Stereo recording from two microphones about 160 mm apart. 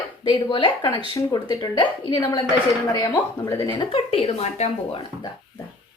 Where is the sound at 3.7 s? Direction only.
35° left (ahead or behind).